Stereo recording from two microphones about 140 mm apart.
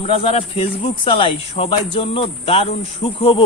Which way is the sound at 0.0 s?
45° left (ahead or behind).